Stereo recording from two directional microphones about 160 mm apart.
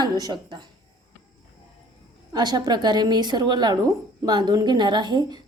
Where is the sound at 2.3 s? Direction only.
25° right (ahead or behind).